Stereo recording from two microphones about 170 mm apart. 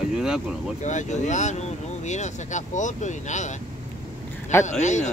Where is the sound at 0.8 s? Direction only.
45° left (ahead or behind).